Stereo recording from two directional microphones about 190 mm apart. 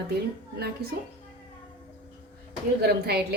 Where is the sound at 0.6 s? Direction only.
55° right (ahead or behind).